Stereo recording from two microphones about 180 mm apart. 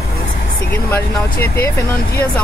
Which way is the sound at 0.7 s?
10° left (ahead or behind).